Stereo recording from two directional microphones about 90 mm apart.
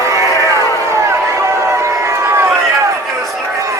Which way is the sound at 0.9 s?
35° right (ahead or behind).